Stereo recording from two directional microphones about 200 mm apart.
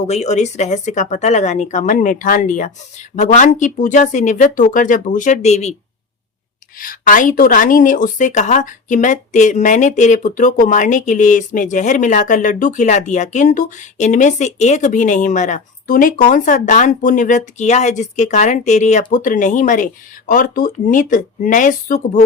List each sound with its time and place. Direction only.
0.1 s a woman's voice: 35° left (ahead or behind)
6.7 s a woman's voice: 45° left (ahead or behind)